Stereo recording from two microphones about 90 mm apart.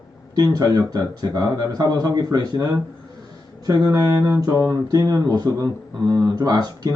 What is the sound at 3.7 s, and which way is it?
Speech, 50° right (ahead or behind).